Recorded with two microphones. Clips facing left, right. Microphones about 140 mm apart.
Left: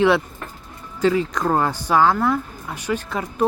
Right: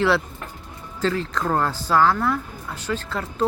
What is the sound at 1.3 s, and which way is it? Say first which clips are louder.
Speech: left 2 dB; 15° left (ahead or behind).